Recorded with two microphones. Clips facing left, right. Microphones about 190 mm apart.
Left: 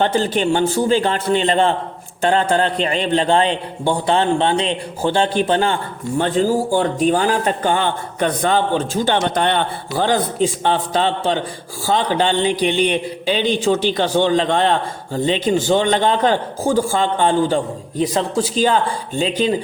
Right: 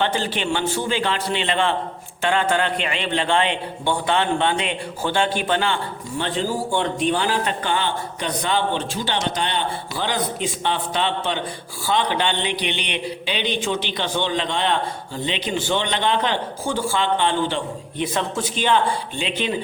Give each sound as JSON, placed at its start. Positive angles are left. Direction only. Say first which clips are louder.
{"t": 0.0, "sound": "a man's voice", "louder": "left 6 dB", "side_deg": 40}